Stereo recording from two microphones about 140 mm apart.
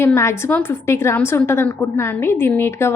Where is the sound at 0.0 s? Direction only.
20° left (ahead or behind).